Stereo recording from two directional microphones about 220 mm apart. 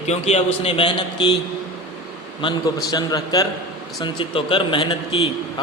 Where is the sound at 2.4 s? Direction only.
20° left (ahead or behind).